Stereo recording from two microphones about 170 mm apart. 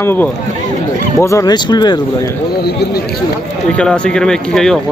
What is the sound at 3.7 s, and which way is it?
Speech, 5° left (ahead or behind).